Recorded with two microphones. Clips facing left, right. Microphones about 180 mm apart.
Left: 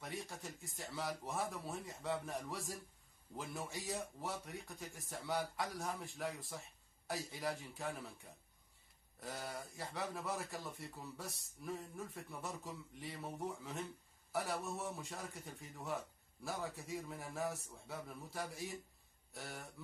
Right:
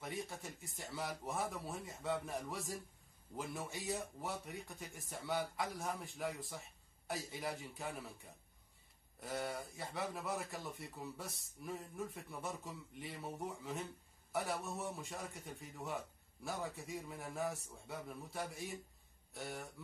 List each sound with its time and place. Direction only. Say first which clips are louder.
0.0 s a man's voice: right 2 dB; centre (ahead or behind)